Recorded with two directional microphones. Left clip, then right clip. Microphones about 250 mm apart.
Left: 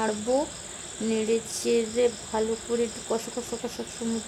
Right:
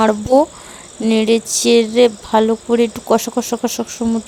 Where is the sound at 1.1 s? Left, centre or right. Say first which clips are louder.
Right 12 dB; right.